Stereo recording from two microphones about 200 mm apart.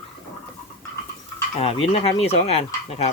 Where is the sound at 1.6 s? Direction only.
30° left (ahead or behind).